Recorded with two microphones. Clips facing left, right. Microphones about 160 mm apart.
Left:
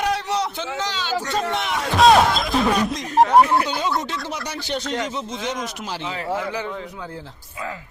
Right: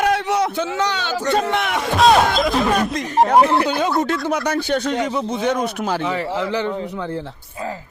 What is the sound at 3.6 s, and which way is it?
A man's voice, 55° right (ahead or behind).